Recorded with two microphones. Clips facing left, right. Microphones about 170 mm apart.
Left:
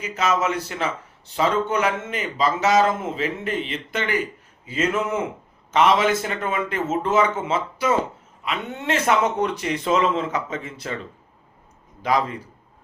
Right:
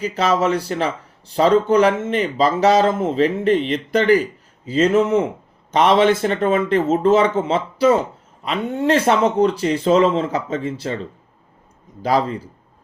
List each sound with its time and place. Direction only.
0.0 s speech: 35° right (ahead or behind)
12.0 s speech: 35° right (ahead or behind)